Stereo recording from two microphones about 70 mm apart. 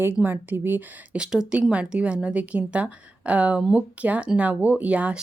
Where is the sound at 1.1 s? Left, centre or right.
Centre.